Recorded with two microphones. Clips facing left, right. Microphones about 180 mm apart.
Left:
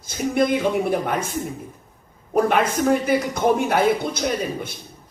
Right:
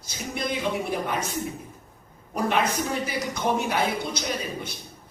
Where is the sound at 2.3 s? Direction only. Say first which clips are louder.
Left 6 dB; 50° left (ahead or behind).